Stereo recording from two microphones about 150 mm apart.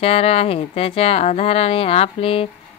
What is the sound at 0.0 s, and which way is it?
A woman's voice, 40° left (ahead or behind).